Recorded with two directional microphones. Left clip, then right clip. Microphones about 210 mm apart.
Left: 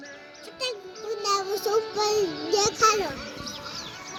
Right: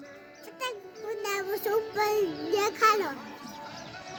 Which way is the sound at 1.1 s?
35° right (ahead or behind).